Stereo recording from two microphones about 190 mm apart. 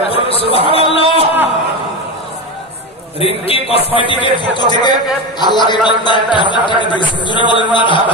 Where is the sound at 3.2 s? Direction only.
30° left (ahead or behind).